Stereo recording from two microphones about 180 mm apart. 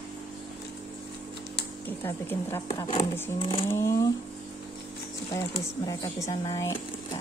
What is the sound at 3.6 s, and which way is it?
Speech, 15° left (ahead or behind).